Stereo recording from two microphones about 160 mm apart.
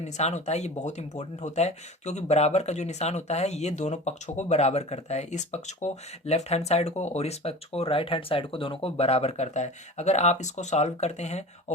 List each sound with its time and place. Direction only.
0.0 s speech: 45° left (ahead or behind)